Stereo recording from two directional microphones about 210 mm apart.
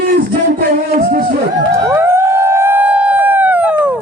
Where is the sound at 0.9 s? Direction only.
45° right (ahead or behind).